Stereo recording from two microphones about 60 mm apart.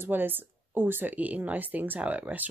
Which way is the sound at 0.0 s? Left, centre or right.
Right.